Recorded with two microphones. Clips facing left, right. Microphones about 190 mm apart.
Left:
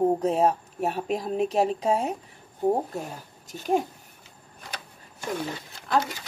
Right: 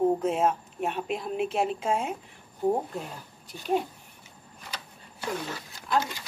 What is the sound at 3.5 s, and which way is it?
Speech, 45° left (ahead or behind).